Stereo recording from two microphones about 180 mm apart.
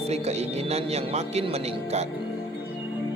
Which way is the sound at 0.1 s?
35° right (ahead or behind).